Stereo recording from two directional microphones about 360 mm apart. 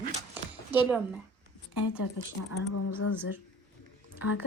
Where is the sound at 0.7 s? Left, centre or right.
Centre.